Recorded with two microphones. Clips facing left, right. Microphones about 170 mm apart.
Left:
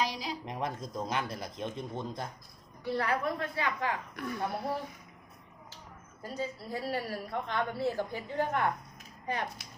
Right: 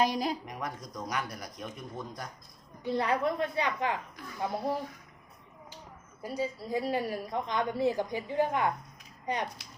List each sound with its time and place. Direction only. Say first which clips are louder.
0.0 s speech: right 6 dB; 50° right (ahead or behind)
0.4 s a man's voice: left 3 dB; 25° left (ahead or behind)
2.8 s a woman's voice: right 2 dB; 20° right (ahead or behind)
6.2 s a woman's voice: right 3 dB; 10° right (ahead or behind)